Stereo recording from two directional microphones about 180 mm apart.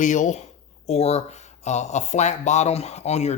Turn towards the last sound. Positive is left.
turn(degrees=40)  # may be behind; listen again after turning